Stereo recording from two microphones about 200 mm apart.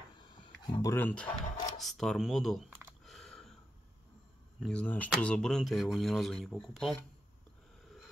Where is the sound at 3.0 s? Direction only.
Centre (ahead or behind).